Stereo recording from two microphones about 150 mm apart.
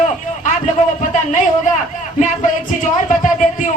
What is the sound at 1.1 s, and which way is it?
Speech, 60° left (ahead or behind).